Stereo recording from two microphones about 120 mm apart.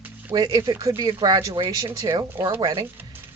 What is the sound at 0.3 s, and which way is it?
Speech, 30° right (ahead or behind).